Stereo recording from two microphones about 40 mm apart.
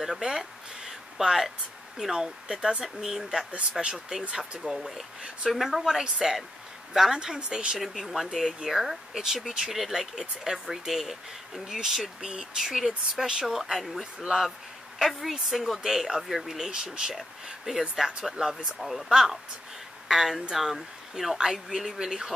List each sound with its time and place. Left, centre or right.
0.0 s a sound: centre
2.0 s speech: centre
4.7 s speech: centre
7.9 s speech: centre
12.2 s speech: centre
12.6 s speech: centre
18.8 s speech: centre